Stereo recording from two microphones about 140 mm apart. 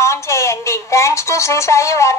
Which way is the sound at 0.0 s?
20° left (ahead or behind).